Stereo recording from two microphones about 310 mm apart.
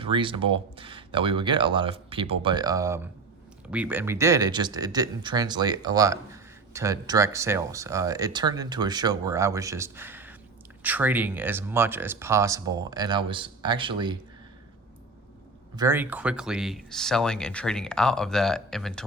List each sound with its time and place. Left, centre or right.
0.0 s speech: centre
15.7 s speech: centre